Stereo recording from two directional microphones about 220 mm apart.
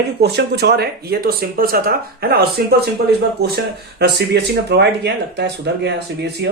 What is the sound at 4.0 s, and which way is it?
Speech, 50° right (ahead or behind).